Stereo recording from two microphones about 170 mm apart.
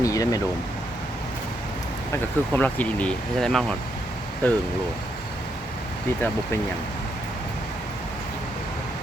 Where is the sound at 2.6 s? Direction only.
10° left (ahead or behind).